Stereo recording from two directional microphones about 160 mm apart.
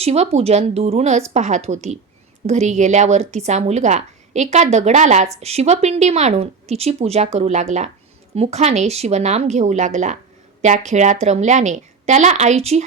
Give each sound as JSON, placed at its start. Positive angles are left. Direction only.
{"t": 0.0, "sound": "speech", "side_deg": -40}